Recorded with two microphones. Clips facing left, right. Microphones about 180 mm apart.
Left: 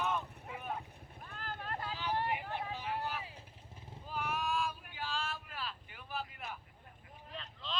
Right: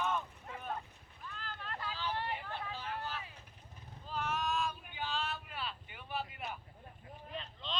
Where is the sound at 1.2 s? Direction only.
50° left (ahead or behind).